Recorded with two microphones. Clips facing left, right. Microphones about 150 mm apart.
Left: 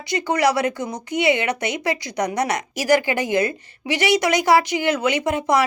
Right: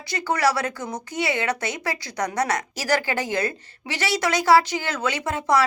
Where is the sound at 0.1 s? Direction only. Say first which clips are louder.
Left 3 dB; 15° left (ahead or behind).